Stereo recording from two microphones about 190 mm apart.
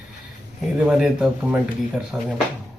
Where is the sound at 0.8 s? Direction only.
5° right (ahead or behind).